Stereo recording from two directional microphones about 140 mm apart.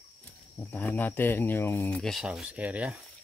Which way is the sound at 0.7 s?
10° left (ahead or behind).